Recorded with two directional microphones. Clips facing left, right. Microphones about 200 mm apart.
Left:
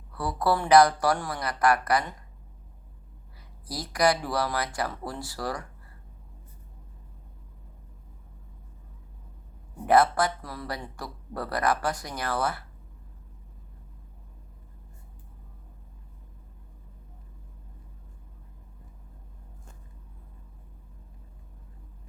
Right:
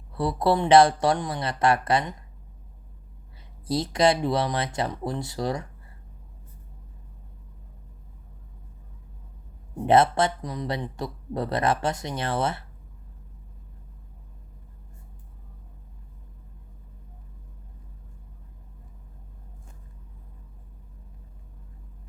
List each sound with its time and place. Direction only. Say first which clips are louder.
0.1 s speech: right 3 dB; 25° right (ahead or behind)
3.7 s speech: right 3 dB; 25° right (ahead or behind)
9.8 s speech: right 2 dB; 25° right (ahead or behind)